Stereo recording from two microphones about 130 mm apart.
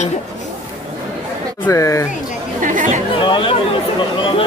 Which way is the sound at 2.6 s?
85° right.